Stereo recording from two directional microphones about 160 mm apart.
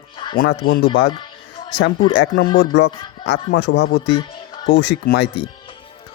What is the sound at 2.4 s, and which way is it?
Speech, 90° left.